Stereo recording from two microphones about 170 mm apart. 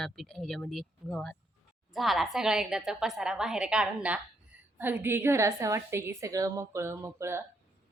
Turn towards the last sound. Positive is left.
turn(degrees=-15)  # may be behind; listen again after turning